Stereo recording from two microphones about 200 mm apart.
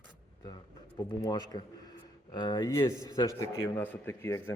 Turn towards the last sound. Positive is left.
turn(degrees=10)  # may be behind; listen again after turning